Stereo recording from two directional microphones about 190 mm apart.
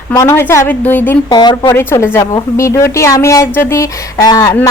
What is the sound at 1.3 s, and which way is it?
A woman's voice, 20° left (ahead or behind).